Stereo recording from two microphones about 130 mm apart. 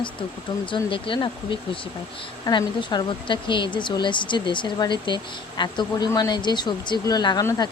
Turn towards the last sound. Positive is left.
turn(degrees=30)  # may be behind; listen again after turning